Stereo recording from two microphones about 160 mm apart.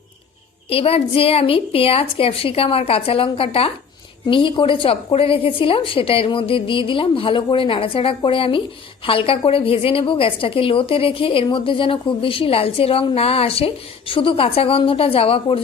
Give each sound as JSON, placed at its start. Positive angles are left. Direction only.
{"t": 0.7, "sound": "a woman's voice", "side_deg": 35}